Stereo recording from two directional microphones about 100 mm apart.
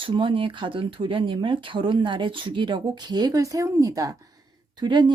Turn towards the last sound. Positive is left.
turn(degrees=-50)  # may be behind; listen again after turning